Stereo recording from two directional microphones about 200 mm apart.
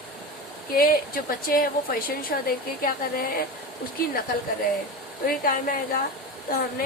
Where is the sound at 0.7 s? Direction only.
45° left (ahead or behind).